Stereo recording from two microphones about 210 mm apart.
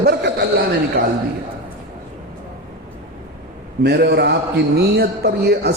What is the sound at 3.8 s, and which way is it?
A man's voice, 50° right (ahead or behind).